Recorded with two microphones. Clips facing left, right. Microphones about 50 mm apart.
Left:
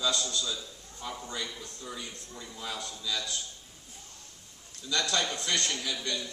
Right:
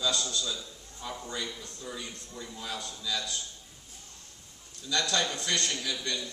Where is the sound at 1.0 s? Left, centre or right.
Centre.